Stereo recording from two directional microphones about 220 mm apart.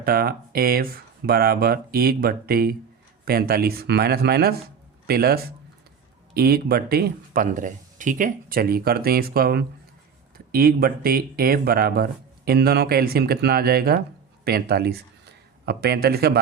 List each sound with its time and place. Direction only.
0.0 s speech: 45° right (ahead or behind)